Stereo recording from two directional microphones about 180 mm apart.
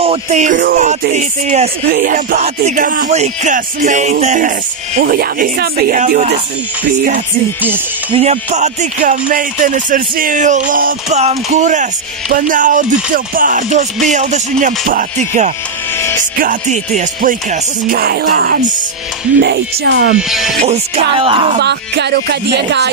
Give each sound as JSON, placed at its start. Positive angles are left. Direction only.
{"t": 0.0, "sound": "speech", "side_deg": -35}
{"t": 5.0, "sound": "speech", "side_deg": -55}
{"t": 8.1, "sound": "speech", "side_deg": -35}
{"t": 20.2, "sound": "speech", "side_deg": 0}
{"t": 20.6, "sound": "speech", "side_deg": -35}
{"t": 21.5, "sound": "speech", "side_deg": -70}